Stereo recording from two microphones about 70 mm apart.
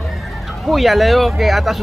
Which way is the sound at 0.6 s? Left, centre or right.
Centre.